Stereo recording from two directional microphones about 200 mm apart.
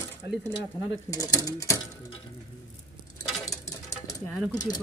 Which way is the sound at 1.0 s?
15° left (ahead or behind).